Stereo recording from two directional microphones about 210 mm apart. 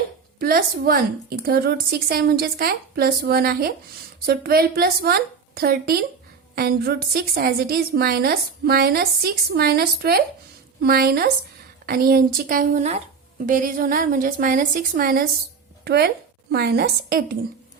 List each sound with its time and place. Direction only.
0.3 s a woman's voice: 45° right (ahead or behind)